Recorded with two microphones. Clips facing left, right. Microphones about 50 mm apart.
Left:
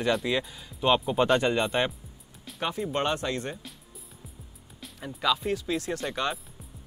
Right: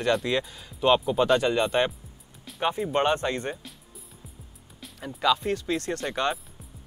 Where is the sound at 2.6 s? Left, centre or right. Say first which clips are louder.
Right 4 dB; centre.